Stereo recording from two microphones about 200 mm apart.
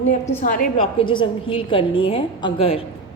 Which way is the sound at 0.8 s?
25° left (ahead or behind).